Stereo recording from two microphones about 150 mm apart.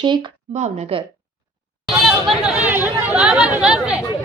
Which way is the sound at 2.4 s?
10° right (ahead or behind).